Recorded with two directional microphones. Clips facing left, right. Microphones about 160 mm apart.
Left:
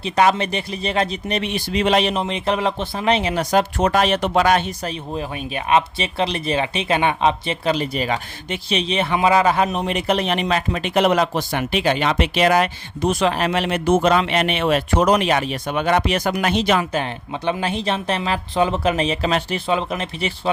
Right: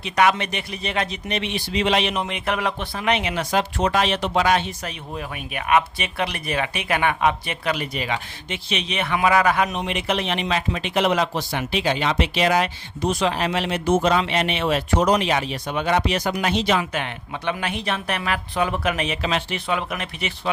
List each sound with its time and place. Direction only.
0.0 s speech: 30° left (ahead or behind); by 4.6 s 50° left (ahead or behind)
4.8 s speech: 30° left (ahead or behind); by 16.8 s 50° left (ahead or behind)
16.9 s speech: 30° left (ahead or behind)